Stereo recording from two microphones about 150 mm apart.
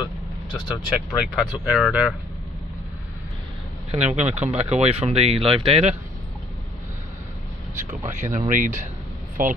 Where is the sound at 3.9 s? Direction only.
45° right (ahead or behind).